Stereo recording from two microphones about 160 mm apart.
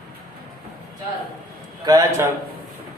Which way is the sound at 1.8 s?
25° right (ahead or behind).